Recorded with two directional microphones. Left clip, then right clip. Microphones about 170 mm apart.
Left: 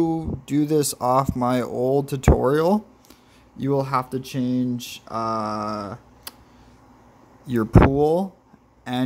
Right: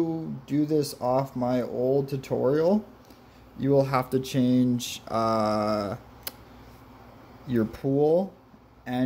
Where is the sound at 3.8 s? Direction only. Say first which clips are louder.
Left 2 dB; 10° left (ahead or behind).